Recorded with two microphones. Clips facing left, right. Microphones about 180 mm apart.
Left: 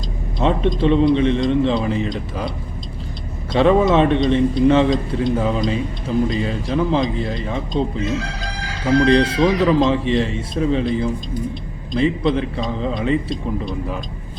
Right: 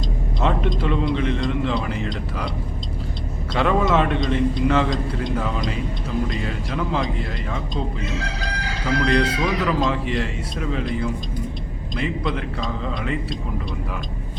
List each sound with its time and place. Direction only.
0.3 s speech: 25° left (ahead or behind)
3.5 s speech: 25° left (ahead or behind)
9.0 s speech: 25° left (ahead or behind)